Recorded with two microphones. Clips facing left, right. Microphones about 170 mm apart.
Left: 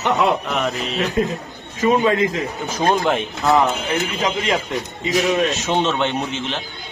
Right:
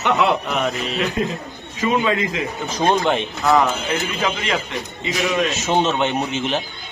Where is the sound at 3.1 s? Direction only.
Centre (ahead or behind).